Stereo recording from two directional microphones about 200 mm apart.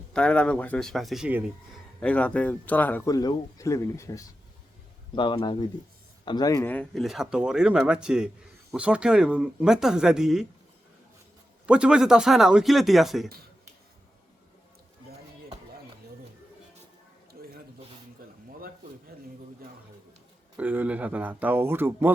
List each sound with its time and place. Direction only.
0.1 s speech: 5° left (ahead or behind)
2.0 s speech: 5° left (ahead or behind)
11.6 s speech: 5° right (ahead or behind)
17.3 s a sound: 45° right (ahead or behind)
20.6 s speech: 5° right (ahead or behind)